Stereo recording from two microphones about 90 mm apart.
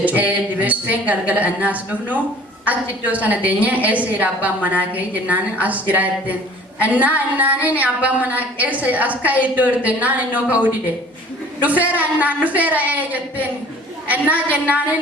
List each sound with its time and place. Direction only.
0.0 s a woman's voice: 15° right (ahead or behind)